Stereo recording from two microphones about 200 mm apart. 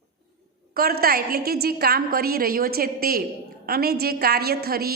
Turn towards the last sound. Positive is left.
turn(degrees=-50)  # may be behind; listen again after turning